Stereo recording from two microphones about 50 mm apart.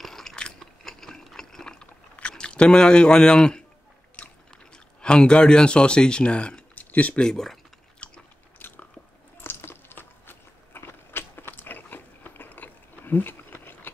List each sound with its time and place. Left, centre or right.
0.0 s a sound: centre
2.3 s speech: centre
4.7 s speech: centre
6.7 s a sound: left
7.2 s speech: centre
8.5 s biting: left